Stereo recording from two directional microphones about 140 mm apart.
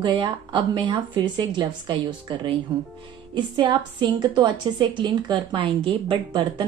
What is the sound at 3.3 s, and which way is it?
A woman's voice, 35° right (ahead or behind).